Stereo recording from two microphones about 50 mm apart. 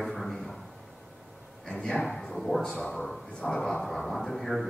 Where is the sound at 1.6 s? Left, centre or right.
Centre.